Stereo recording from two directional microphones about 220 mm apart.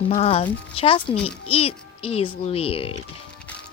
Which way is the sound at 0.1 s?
25° left (ahead or behind).